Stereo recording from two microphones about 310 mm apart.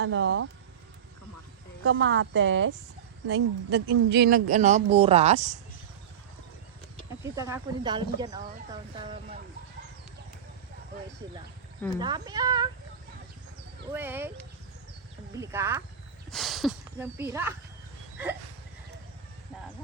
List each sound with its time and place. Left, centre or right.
0.0 s a woman's voice: right
1.8 s a woman's voice: right
7.2 s speech: centre
11.2 s speech: centre
13.9 s speech: centre
15.4 s speech: centre